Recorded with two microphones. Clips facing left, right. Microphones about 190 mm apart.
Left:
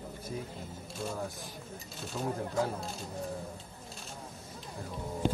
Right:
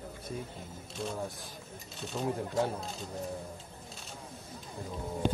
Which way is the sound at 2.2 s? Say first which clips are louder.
Right 2 dB; centre (ahead or behind).